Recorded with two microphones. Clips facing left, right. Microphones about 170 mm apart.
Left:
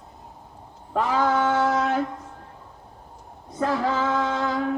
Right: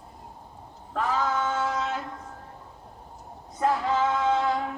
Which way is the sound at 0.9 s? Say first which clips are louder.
Left 5 dB; 80° left.